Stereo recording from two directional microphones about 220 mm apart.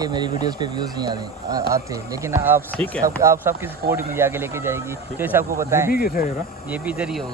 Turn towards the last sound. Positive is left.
turn(degrees=-5)  # may be behind; listen again after turning